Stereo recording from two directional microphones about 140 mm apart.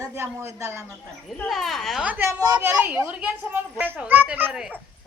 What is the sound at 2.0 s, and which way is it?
A woman's voice, 15° right (ahead or behind).